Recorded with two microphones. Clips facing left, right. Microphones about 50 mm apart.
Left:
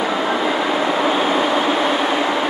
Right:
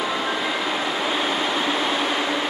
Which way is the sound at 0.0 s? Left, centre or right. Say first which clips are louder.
Left 5 dB; left.